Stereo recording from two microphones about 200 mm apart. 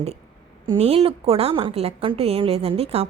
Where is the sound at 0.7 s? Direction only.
30° right (ahead or behind).